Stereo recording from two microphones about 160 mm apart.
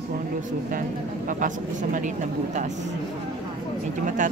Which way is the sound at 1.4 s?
55° right (ahead or behind).